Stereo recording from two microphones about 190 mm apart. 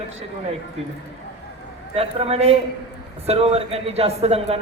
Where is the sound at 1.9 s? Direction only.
30° right (ahead or behind).